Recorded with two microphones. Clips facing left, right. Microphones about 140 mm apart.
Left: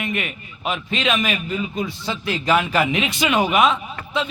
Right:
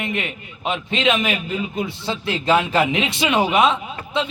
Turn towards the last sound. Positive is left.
turn(degrees=-25)  # may be behind; listen again after turning